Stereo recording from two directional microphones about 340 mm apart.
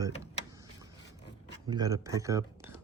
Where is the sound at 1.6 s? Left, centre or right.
Centre.